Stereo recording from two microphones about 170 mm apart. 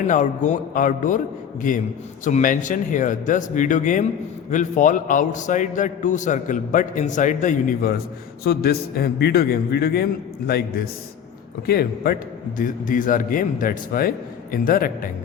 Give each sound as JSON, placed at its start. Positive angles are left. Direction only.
{"t": 0.1, "sound": "a man's voice", "side_deg": 45}
{"t": 8.4, "sound": "a man's voice", "side_deg": 65}
{"t": 11.6, "sound": "a man's voice", "side_deg": 65}
{"t": 12.5, "sound": "a man's voice", "side_deg": 50}